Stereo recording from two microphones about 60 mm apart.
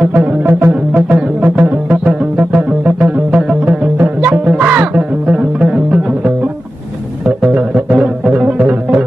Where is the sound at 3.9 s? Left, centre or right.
Right; by 6.0 s centre.